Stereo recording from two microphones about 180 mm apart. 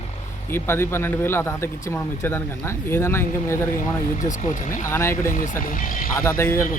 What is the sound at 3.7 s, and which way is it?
Speech, 45° left (ahead or behind).